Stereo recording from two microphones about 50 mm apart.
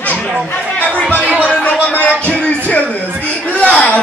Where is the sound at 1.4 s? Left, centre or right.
Left.